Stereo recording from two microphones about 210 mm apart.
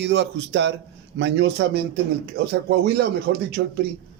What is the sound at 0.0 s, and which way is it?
A man's voice, 55° right (ahead or behind).